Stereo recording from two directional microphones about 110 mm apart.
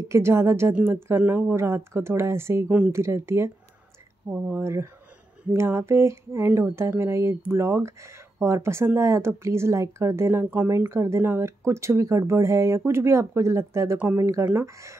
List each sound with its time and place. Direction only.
0.1 s speech: 25° right (ahead or behind)